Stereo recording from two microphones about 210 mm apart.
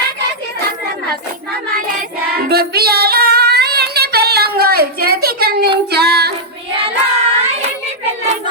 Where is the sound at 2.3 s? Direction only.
50° right (ahead or behind).